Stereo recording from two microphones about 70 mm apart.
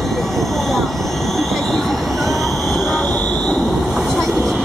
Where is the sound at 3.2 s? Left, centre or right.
Centre.